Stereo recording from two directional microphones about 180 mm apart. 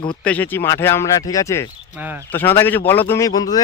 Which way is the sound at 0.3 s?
10° left (ahead or behind).